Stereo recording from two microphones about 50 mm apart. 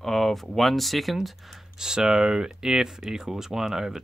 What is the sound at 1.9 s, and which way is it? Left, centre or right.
Speech, centre.